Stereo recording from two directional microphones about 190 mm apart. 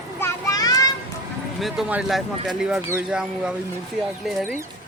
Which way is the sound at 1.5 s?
Centre (ahead or behind).